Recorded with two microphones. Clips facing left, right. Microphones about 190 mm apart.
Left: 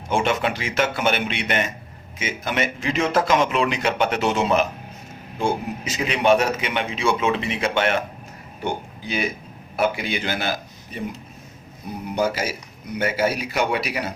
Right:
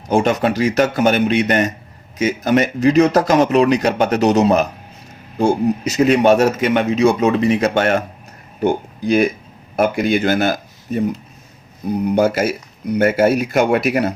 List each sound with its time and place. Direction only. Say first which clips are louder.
0.1 s a man's voice: right 6 dB; 40° right (ahead or behind)
12.1 s a man's voice: right 6 dB; 50° right (ahead or behind)